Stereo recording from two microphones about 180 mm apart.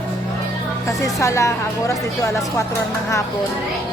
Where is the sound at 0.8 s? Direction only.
20° left (ahead or behind).